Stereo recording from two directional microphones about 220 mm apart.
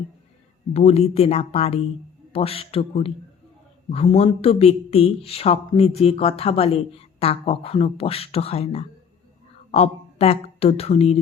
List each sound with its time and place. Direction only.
0.7 s speech: 25° left (ahead or behind)